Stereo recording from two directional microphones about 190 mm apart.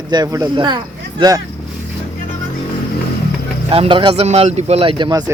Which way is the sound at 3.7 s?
25° right (ahead or behind).